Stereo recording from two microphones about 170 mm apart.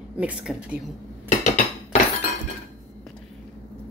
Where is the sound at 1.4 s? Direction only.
45° left (ahead or behind).